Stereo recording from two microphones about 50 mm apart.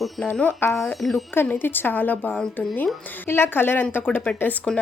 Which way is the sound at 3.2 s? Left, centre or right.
Left.